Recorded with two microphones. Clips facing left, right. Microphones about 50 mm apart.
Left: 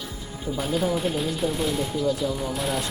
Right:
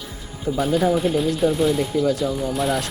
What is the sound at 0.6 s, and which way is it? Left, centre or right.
Speech, centre.